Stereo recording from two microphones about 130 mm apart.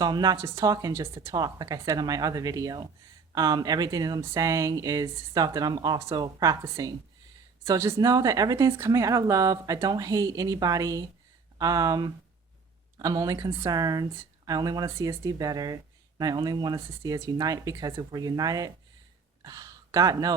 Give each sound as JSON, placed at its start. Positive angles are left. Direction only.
{"t": 0.0, "sound": "speech", "side_deg": -30}